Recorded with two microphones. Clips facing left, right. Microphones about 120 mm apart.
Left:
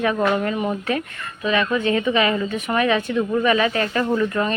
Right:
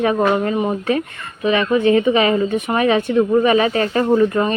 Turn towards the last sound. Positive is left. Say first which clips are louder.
# right 5 dB
turn(degrees=-30)  # may be behind; listen again after turning